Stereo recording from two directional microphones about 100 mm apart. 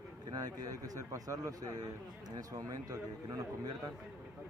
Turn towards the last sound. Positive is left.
turn(degrees=-40)  # may be behind; listen again after turning